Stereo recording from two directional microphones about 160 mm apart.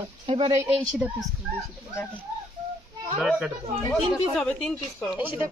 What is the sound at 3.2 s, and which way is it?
A woman's voice, 5° right (ahead or behind).